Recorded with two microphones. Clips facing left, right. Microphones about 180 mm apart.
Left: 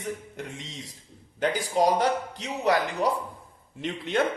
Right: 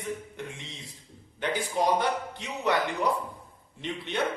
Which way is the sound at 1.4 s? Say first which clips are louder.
Left 4 dB; 40° left (ahead or behind).